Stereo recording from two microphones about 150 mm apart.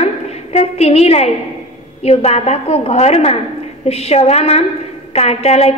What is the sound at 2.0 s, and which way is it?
A woman's voice, 45° left (ahead or behind).